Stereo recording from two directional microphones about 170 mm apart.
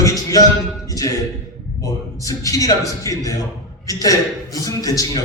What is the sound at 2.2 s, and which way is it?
A man's voice, 20° left (ahead or behind).